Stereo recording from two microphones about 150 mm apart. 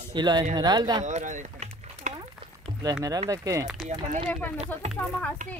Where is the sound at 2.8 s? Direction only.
25° right (ahead or behind).